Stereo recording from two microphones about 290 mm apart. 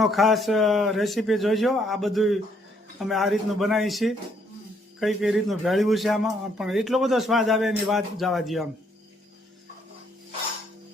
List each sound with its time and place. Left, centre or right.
0.0 s a man's voice: centre